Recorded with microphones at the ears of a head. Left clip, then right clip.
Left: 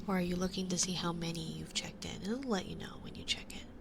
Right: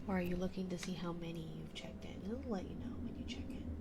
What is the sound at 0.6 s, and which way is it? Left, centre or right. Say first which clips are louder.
Speech: left 8 dB; left.